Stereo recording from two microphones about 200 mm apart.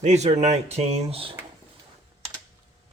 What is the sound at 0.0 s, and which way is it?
Speech, 35° right (ahead or behind).